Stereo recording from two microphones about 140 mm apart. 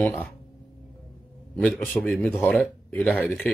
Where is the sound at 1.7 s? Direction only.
Centre (ahead or behind).